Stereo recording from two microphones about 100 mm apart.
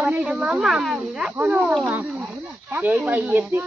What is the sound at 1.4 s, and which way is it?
Speech, 15° right (ahead or behind).